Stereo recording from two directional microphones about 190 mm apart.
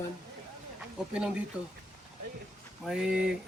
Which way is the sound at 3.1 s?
50° right (ahead or behind).